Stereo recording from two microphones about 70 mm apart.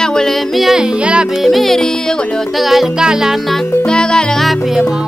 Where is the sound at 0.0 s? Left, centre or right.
Centre.